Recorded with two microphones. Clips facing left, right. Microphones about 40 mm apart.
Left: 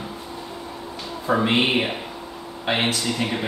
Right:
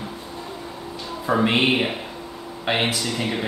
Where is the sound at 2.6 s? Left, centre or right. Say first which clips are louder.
Even; centre.